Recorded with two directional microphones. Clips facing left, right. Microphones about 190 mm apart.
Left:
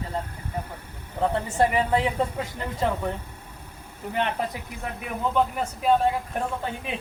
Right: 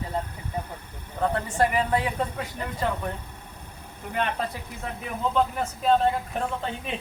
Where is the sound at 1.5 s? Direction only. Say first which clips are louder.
Left 2 dB; 25° left (ahead or behind).